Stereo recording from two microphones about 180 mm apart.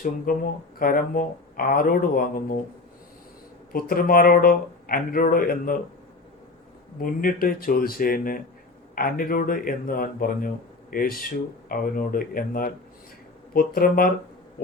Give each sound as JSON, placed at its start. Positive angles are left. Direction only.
{"t": 0.0, "sound": "speech", "side_deg": 50}
{"t": 3.7, "sound": "speech", "side_deg": 55}
{"t": 7.0, "sound": "speech", "side_deg": 50}